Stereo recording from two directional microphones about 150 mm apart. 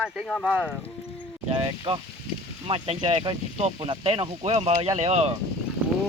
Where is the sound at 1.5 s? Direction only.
35° right (ahead or behind).